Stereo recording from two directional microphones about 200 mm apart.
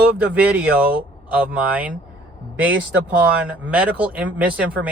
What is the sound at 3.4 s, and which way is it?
Speech, 5° right (ahead or behind).